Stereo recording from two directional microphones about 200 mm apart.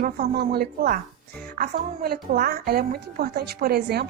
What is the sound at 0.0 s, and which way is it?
A woman's voice, 50° right (ahead or behind).